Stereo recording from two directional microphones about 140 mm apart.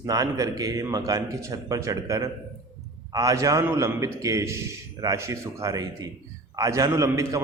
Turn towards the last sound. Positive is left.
turn(degrees=-25)  # may be behind; listen again after turning